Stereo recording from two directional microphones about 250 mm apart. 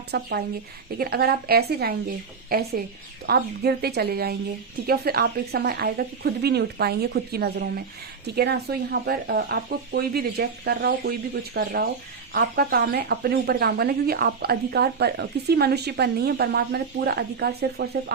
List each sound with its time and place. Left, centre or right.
0.1 s speech: right